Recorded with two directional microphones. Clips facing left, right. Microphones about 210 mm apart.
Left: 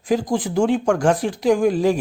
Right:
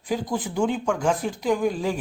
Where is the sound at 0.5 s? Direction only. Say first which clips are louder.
Left 6 dB; 80° left.